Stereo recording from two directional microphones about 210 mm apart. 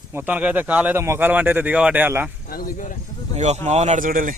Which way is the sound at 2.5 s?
40° left (ahead or behind).